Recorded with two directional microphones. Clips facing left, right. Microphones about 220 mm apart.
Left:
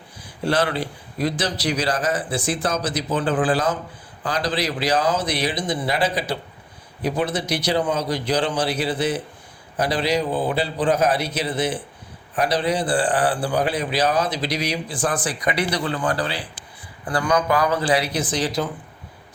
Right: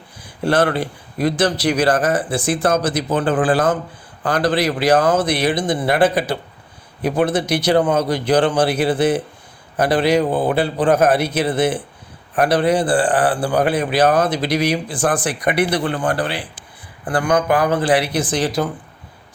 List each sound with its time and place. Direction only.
0.4 s a man's voice: 55° right (ahead or behind)